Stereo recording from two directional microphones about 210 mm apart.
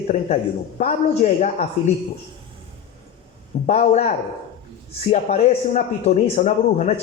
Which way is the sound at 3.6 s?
30° left (ahead or behind).